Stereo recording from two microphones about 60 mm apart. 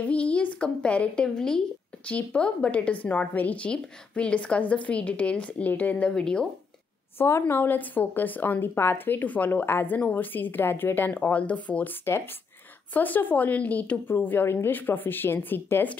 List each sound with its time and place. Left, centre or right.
0.0 s a woman's voice: left
7.2 s a woman's voice: left
12.9 s a woman's voice: left